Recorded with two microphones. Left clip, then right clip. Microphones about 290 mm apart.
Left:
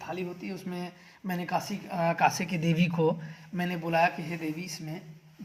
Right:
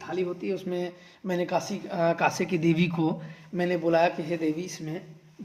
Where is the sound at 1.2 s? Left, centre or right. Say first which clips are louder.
Right 6 dB; left.